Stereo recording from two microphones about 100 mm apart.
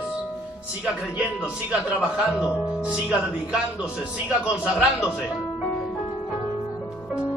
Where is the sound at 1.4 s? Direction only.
10° right (ahead or behind).